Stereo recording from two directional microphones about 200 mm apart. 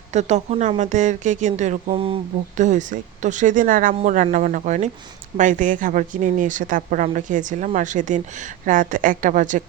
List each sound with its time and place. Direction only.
0.1 s a woman's voice: 35° right (ahead or behind)